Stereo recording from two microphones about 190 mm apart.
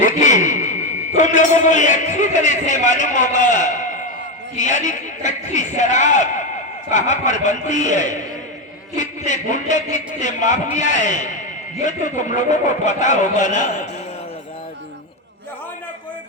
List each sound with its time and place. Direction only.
0.0 s a man's voice: 40° left (ahead or behind)